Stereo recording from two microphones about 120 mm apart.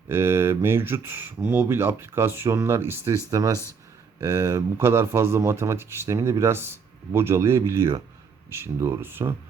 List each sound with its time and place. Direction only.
0.1 s speech: 20° right (ahead or behind)